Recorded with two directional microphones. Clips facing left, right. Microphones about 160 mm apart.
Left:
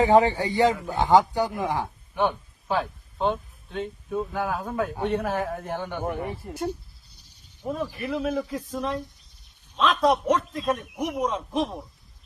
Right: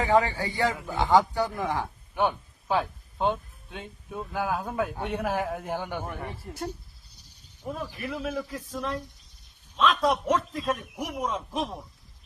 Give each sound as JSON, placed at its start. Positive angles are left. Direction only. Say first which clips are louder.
{"t": 0.0, "sound": "speech", "louder": "left 5 dB", "side_deg": 25}
{"t": 2.1, "sound": "a sound", "louder": "left 1 dB", "side_deg": -10}
{"t": 3.7, "sound": "a man's voice", "louder": "left 9 dB", "side_deg": -10}
{"t": 6.1, "sound": "speech", "louder": "left 7 dB", "side_deg": 15}
{"t": 7.7, "sound": "a man's voice", "louder": "left 5 dB", "side_deg": 0}